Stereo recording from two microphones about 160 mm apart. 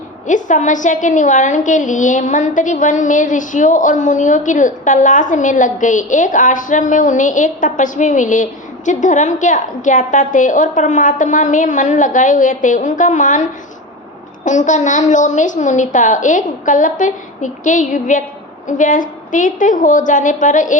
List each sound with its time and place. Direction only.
0.3 s a woman's voice: 50° left (ahead or behind)